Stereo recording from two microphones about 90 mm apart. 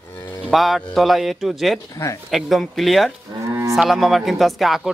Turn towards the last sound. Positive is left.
turn(degrees=0)  # may be behind; listen again after turning